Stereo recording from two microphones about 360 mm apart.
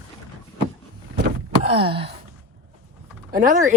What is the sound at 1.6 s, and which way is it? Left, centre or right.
Speech, centre.